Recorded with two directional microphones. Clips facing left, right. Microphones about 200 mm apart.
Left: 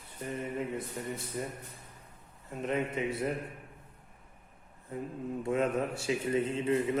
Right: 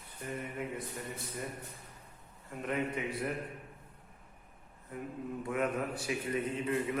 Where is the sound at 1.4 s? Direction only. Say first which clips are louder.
Left 3 dB; 25° left (ahead or behind).